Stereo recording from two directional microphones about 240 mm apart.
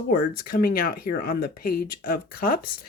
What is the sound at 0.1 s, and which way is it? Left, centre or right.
Speech, left.